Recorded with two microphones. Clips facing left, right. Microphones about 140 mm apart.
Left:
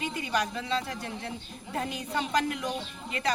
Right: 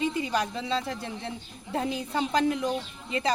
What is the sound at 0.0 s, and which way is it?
A woman's voice, 30° right (ahead or behind).